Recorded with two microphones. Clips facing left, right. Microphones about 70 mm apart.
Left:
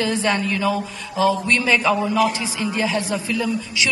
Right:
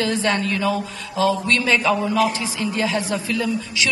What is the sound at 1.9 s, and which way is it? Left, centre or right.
Speech, centre.